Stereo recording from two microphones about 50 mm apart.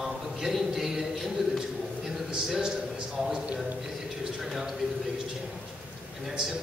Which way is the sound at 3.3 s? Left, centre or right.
Right.